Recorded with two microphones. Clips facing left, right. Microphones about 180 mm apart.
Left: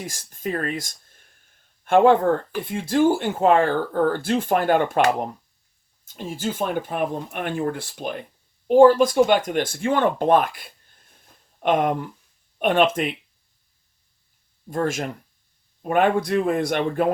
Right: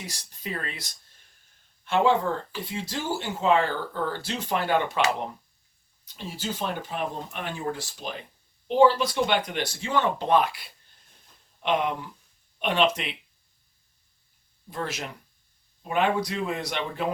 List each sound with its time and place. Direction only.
0.0 s speech: 50° left (ahead or behind)
14.7 s speech: 45° left (ahead or behind)